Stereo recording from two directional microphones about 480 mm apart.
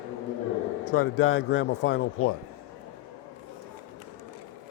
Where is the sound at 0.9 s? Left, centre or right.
Left.